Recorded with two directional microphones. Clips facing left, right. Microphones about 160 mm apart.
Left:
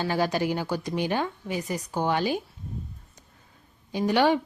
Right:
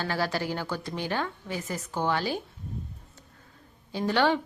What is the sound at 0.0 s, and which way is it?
Speech, 15° left (ahead or behind).